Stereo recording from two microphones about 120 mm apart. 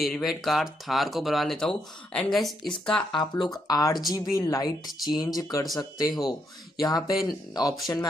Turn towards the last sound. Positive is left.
turn(degrees=35)  # may be behind; listen again after turning